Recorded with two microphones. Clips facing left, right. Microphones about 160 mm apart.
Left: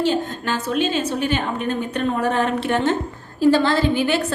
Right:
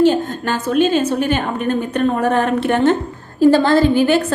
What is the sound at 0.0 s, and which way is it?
A woman's voice, 50° right (ahead or behind).